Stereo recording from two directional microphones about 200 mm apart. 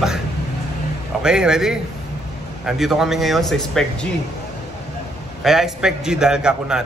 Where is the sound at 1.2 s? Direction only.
5° right (ahead or behind).